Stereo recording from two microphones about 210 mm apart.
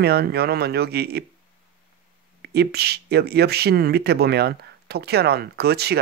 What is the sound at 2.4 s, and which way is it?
Speech, 50° right (ahead or behind).